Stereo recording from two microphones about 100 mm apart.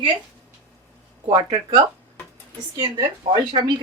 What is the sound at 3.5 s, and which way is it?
Speech, 60° right (ahead or behind).